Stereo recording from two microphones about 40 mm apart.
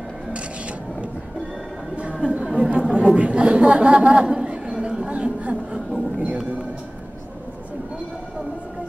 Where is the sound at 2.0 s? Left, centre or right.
Right.